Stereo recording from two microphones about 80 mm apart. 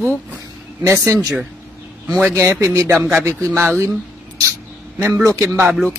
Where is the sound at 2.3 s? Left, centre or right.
Right.